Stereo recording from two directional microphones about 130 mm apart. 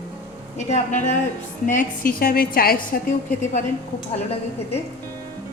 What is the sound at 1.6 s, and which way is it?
A woman's voice, 90° left.